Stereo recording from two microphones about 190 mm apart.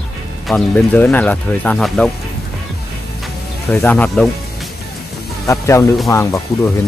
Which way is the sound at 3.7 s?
10° left (ahead or behind).